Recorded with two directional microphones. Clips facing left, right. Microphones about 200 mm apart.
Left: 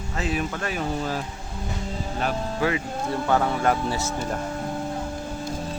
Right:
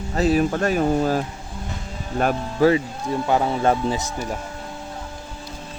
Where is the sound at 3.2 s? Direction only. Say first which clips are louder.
Right 3 dB; 20° right (ahead or behind).